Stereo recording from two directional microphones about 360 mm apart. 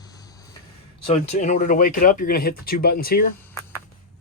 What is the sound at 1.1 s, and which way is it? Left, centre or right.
Speech, centre.